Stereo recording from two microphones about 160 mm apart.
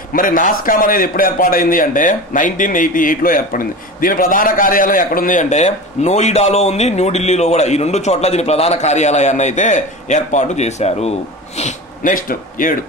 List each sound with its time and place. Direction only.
0.1 s a man's voice: 60° left (ahead or behind)